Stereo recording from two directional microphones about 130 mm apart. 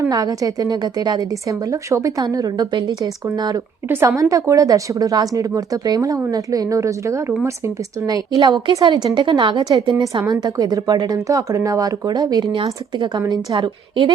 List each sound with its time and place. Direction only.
0.0 s a woman's voice: 30° right (ahead or behind)
3.8 s a woman's voice: 15° right (ahead or behind); by 14.1 s 40° right (ahead or behind)